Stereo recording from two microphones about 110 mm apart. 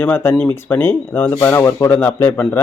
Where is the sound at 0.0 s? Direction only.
20° left (ahead or behind).